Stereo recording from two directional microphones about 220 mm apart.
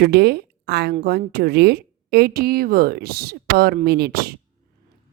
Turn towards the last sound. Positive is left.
turn(degrees=-45)  # may be behind; listen again after turning